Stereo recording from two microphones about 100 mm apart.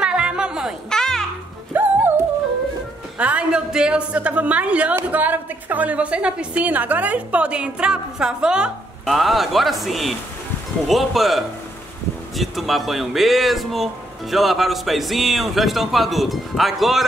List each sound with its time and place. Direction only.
0.0 s music: 10° right (ahead or behind)
0.8 s music: 5° left (ahead or behind)
1.7 s music: 20° right (ahead or behind)
3.2 s a woman's voice: 10° right (ahead or behind)